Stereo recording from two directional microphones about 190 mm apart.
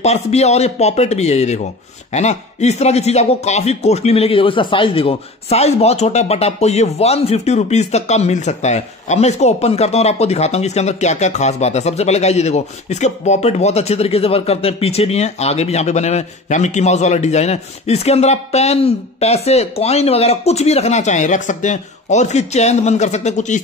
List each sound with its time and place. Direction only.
0.0 s speech: 35° left (ahead or behind)